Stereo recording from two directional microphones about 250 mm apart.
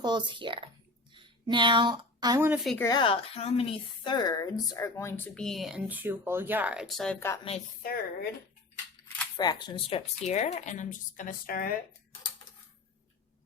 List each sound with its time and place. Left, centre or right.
0.0 s a woman's voice: centre
2.7 s a woman's voice: centre
7.4 s speech: left
9.4 s speech: centre; by 11.8 s left